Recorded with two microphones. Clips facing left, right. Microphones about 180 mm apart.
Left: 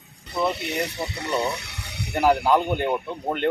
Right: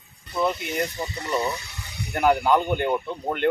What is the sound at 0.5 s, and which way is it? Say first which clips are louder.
Speech: even; 70° left (ahead or behind).